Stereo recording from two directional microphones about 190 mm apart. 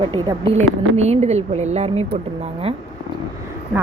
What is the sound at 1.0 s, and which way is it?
Speech, 35° right (ahead or behind).